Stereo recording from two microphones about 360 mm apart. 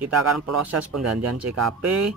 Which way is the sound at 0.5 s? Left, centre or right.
Right.